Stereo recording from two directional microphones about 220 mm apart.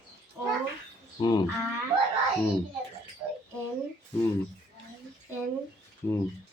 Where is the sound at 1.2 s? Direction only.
20° left (ahead or behind).